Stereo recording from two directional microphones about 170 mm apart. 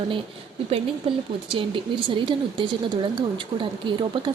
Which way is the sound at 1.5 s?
30° right (ahead or behind).